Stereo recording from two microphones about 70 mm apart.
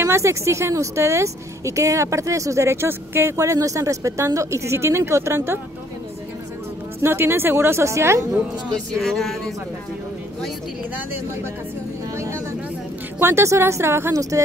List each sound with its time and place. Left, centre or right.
0.0 s speech: right
3.3 s speech: right
7.0 s a woman's voice: right
9.0 s speech: centre
13.2 s a woman's voice: right